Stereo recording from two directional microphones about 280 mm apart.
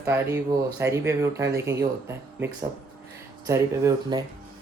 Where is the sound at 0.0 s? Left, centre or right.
Centre.